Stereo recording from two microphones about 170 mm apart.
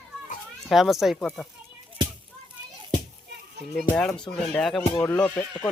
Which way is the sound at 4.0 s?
5° left (ahead or behind).